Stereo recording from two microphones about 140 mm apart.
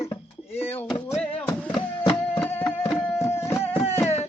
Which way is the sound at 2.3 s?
15° left (ahead or behind).